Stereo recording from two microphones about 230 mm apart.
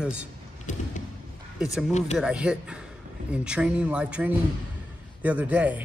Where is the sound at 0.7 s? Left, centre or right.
Left.